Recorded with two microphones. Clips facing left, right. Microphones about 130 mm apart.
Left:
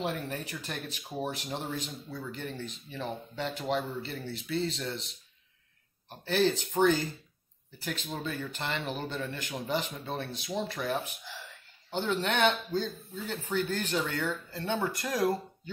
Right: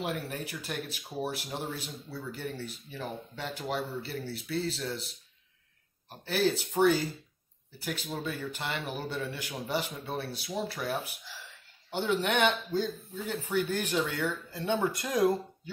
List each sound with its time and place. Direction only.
0.0 s a man's voice: 5° right (ahead or behind); by 15.2 s 20° right (ahead or behind)